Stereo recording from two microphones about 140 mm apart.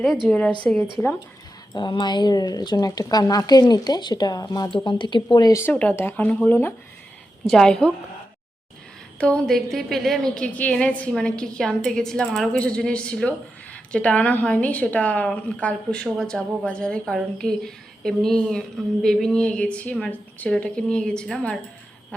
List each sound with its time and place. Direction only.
0.3 s a woman's voice: 5° left (ahead or behind)
1.7 s speech: 35° left (ahead or behind)
5.7 s a woman's voice: centre (ahead or behind)
6.0 s a woman's voice: 15° left (ahead or behind)
7.4 s a woman's voice: 5° left (ahead or behind)
9.1 s a woman's voice: 5° left (ahead or behind)